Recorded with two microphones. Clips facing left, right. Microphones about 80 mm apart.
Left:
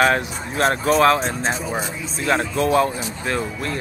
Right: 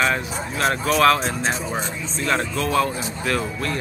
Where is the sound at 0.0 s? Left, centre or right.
Left.